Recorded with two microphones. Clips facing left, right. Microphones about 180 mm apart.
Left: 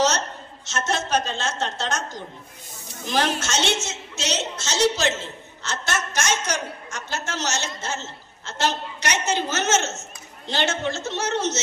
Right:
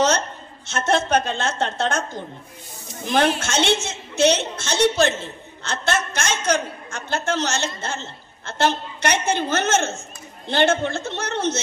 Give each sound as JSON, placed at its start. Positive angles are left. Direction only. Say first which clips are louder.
{"t": 0.7, "sound": "a woman's voice", "louder": "right 5 dB", "side_deg": -55}